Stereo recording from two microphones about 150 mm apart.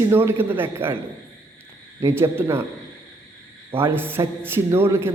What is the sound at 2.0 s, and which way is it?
Speech, 15° right (ahead or behind).